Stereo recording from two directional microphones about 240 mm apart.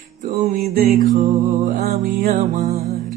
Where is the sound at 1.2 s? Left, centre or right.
Right.